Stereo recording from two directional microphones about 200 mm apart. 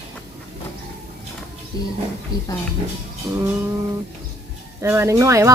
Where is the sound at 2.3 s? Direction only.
20° left (ahead or behind).